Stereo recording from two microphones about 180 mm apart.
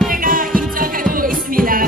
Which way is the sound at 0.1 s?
50° right (ahead or behind).